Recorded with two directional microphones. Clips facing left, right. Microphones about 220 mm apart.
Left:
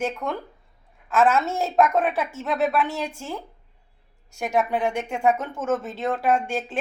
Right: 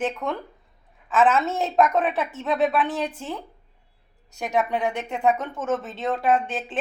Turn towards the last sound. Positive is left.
turn(degrees=0)  # may be behind; listen again after turning